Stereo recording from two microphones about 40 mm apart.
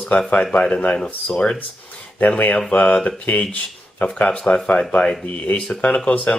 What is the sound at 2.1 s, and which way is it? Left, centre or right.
Speech, left.